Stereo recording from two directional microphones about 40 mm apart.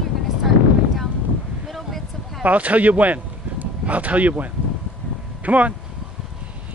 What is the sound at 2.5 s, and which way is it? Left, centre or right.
Speech, right.